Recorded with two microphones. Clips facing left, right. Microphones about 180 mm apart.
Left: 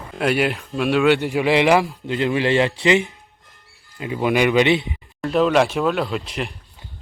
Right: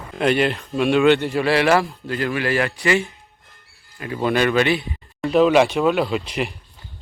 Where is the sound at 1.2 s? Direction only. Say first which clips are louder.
Left 1 dB; 15° left (ahead or behind).